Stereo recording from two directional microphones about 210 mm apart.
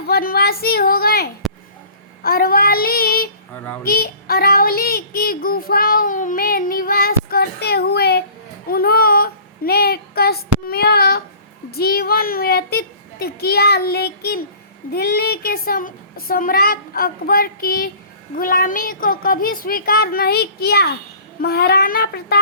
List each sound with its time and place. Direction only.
0.1 s speech: 45° left (ahead or behind)
3.8 s child singing: 45° left (ahead or behind)
11.7 s speech: 45° left (ahead or behind)